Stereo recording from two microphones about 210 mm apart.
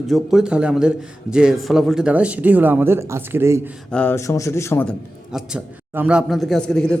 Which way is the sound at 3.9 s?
5° left (ahead or behind).